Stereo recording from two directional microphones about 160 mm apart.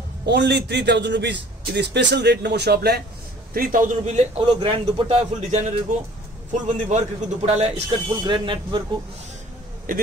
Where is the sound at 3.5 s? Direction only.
60° right (ahead or behind).